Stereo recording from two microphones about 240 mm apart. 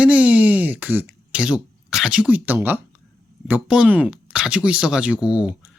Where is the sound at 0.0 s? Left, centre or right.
Centre.